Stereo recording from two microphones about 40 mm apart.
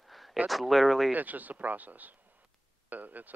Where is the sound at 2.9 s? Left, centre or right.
Right.